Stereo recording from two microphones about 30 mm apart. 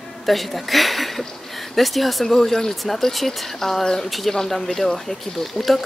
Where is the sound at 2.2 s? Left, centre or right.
Centre.